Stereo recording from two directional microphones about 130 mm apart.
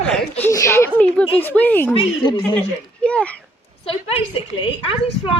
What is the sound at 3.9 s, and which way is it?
A woman's voice, 45° left (ahead or behind).